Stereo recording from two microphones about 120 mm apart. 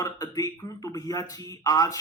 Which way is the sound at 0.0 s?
30° left (ahead or behind).